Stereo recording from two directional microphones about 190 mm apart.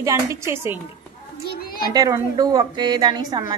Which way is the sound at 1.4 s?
50° left (ahead or behind).